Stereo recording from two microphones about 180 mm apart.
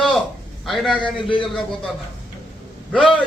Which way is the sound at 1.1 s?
25° left (ahead or behind).